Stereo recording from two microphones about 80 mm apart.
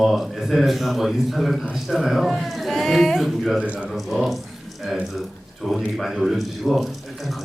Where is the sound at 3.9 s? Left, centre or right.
Centre.